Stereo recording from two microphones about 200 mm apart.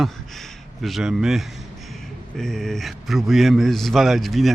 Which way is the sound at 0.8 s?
Centre (ahead or behind).